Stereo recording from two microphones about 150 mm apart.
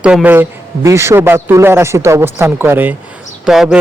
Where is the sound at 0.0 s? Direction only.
10° right (ahead or behind).